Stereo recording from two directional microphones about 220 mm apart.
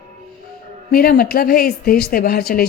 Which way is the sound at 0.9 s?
45° left (ahead or behind).